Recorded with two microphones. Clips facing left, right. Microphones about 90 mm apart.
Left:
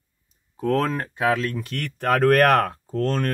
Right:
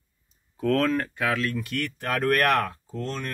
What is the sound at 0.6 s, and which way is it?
Speech, 25° left (ahead or behind).